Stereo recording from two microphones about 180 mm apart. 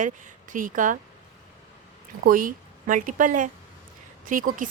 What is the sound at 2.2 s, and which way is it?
A woman's voice, 50° right (ahead or behind).